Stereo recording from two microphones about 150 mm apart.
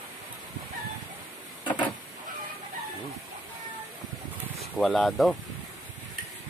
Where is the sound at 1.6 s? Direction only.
30° left (ahead or behind).